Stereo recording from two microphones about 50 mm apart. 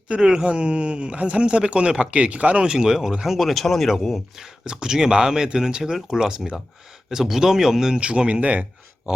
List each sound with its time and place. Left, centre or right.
0.1 s speech: centre
4.6 s speech: centre